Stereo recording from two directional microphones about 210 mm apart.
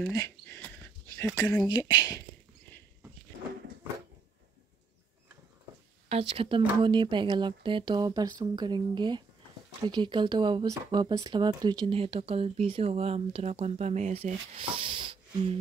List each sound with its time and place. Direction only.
0.1 s a sound: 15° left (ahead or behind)
1.1 s speech: 10° left (ahead or behind)
6.0 s speech: 30° right (ahead or behind)